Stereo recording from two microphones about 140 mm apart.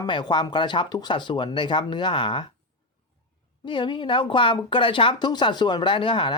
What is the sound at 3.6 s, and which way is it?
Speech, 35° left (ahead or behind).